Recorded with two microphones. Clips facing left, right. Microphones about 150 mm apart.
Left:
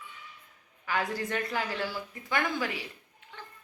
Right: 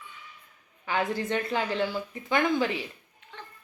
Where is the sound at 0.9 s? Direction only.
25° right (ahead or behind).